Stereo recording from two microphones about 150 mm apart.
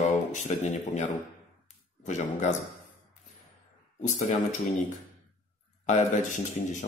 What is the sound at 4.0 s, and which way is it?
Speech, 55° left (ahead or behind).